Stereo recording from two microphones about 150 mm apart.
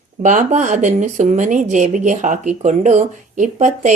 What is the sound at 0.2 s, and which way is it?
Speech, 55° right (ahead or behind).